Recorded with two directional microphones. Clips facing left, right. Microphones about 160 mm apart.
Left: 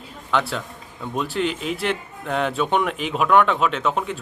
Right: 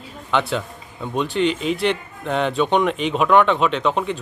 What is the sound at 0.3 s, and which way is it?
A man's voice, centre (ahead or behind).